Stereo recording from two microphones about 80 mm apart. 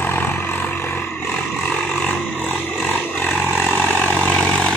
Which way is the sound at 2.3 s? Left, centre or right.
Left.